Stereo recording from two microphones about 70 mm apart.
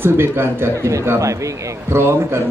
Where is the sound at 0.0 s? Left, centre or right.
Right.